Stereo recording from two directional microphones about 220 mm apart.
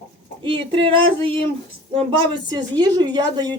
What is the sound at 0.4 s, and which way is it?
A woman's voice, 25° right (ahead or behind).